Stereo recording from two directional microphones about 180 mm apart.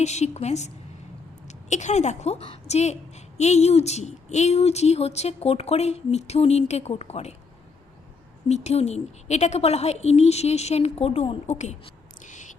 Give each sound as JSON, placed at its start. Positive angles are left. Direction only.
{"t": 0.0, "sound": "a woman's voice", "side_deg": 40}
{"t": 8.4, "sound": "a woman's voice", "side_deg": 40}
{"t": 12.2, "sound": "owl", "side_deg": 45}